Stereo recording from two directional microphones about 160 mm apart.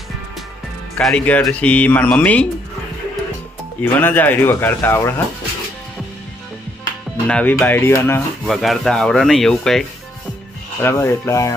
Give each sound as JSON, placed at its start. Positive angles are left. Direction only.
{"t": 0.9, "sound": "speech", "side_deg": 10}
{"t": 3.9, "sound": "speech", "side_deg": 10}
{"t": 7.3, "sound": "speech", "side_deg": 5}
{"t": 8.4, "sound": "speech", "side_deg": 0}
{"t": 10.8, "sound": "speech", "side_deg": 15}